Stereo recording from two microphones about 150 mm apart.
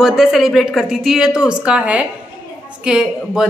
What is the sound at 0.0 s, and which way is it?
A woman's voice, centre (ahead or behind).